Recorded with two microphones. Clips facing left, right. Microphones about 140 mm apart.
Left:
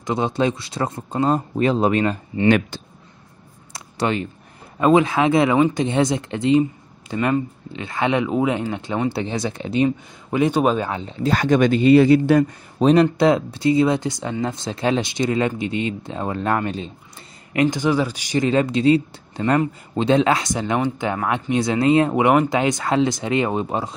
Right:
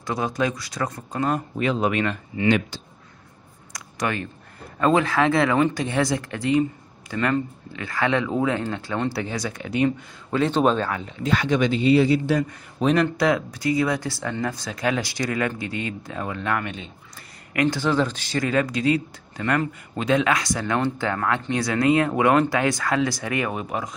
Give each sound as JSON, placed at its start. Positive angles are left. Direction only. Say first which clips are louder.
{"t": 0.0, "sound": "speech", "louder": "left 4 dB", "side_deg": 25}
{"t": 2.4, "sound": "speech", "louder": "left 4 dB", "side_deg": 55}
{"t": 3.7, "sound": "clicking", "louder": "left 4 dB", "side_deg": 25}
{"t": 4.7, "sound": "speech", "louder": "left 4 dB", "side_deg": 15}
{"t": 9.8, "sound": "speech", "louder": "left 2 dB", "side_deg": 15}
{"t": 10.9, "sound": "speech", "louder": "left 3 dB", "side_deg": 25}
{"t": 12.7, "sound": "speech", "louder": "left 5 dB", "side_deg": 30}
{"t": 17.5, "sound": "speech", "louder": "left 3 dB", "side_deg": 20}